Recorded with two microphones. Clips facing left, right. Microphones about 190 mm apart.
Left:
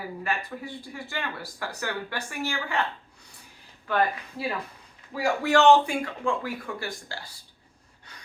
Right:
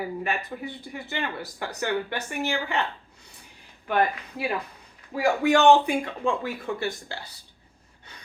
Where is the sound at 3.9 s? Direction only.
15° right (ahead or behind).